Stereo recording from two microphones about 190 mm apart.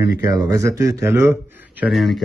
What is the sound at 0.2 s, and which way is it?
Speech, 15° right (ahead or behind).